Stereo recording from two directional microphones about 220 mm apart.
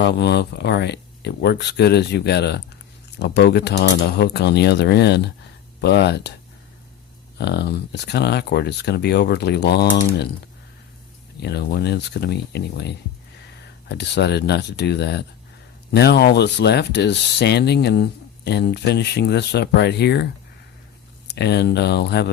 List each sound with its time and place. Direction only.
0.0 s speech: 50° left (ahead or behind)
7.3 s speech: 50° left (ahead or behind)
11.3 s speech: 50° left (ahead or behind)
21.2 s speech: 50° left (ahead or behind)